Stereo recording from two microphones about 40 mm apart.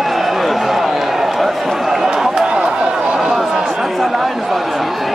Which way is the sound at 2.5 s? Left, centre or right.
Right.